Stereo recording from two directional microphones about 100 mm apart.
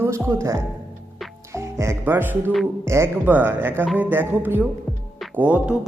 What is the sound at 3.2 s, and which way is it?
A man's voice, 20° right (ahead or behind).